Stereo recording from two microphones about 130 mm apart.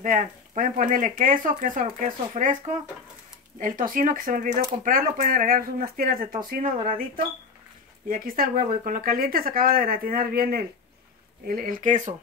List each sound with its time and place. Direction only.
0.0 s speech: 90° right
3.5 s speech: 90° right
11.4 s speech: 90° right